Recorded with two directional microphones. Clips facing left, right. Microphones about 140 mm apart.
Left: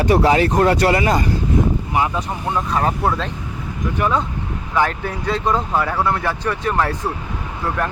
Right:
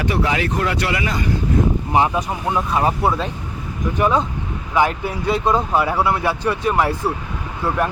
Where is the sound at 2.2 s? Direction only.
10° right (ahead or behind).